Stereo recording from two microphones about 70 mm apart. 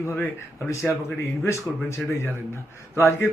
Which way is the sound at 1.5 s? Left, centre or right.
Left.